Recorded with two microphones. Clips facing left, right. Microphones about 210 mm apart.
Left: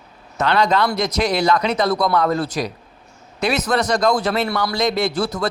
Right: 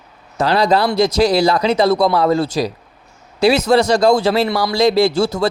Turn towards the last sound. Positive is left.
turn(degrees=-30)  # may be behind; listen again after turning